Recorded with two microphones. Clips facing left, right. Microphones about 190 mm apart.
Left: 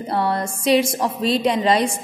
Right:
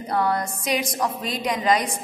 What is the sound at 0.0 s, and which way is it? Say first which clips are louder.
A woman's voice: left 2 dB; 30° left (ahead or behind).